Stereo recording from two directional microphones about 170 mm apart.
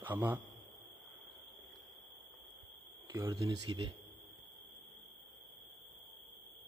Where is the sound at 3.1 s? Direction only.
20° right (ahead or behind).